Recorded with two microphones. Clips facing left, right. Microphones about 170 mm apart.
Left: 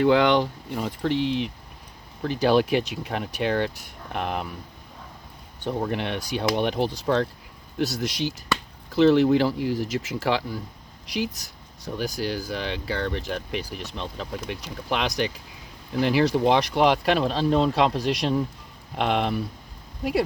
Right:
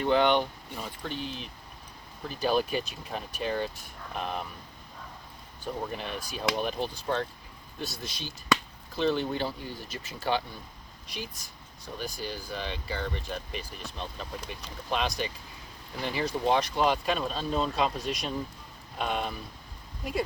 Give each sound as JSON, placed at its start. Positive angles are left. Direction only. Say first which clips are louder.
{"t": 0.0, "sound": "speech", "louder": "left 5 dB", "side_deg": 90}
{"t": 5.6, "sound": "speech", "louder": "left 8 dB", "side_deg": 90}